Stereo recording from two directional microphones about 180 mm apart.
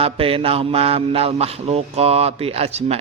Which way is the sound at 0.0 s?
30° right (ahead or behind).